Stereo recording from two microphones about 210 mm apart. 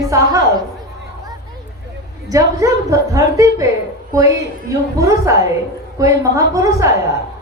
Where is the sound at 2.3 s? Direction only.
15° right (ahead or behind).